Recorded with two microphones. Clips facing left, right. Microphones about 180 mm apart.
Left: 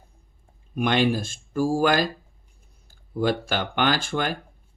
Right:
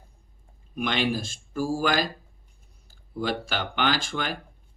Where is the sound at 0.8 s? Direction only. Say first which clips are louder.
Left 5 dB; 50° left (ahead or behind).